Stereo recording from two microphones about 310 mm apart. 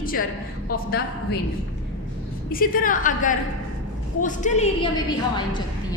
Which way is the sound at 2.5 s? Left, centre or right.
Left.